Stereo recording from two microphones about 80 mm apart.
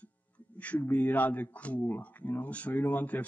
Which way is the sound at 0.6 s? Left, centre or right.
Centre.